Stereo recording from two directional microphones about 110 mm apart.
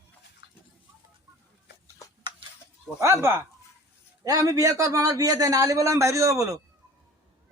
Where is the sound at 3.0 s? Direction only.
25° right (ahead or behind).